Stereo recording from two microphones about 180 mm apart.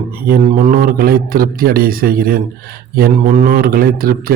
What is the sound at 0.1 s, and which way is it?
Speech, 55° right (ahead or behind).